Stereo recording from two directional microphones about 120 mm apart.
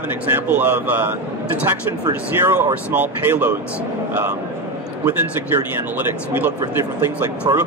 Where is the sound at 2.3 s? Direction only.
20° right (ahead or behind).